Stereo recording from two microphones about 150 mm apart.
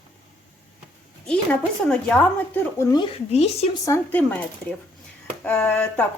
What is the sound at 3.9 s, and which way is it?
Speech, 20° left (ahead or behind).